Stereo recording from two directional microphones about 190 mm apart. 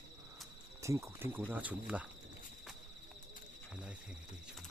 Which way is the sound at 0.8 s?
15° right (ahead or behind).